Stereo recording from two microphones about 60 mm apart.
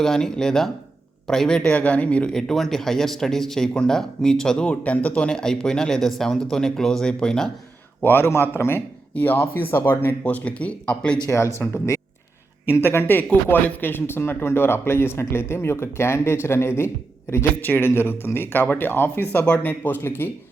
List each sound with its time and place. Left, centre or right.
0.0 s speech: centre
1.7 s speech: left
2.3 s speech: centre
8.0 s speech: left
10.2 s speech: left
11.3 s speech: left